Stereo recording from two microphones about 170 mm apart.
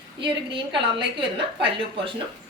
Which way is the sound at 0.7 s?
30° right (ahead or behind).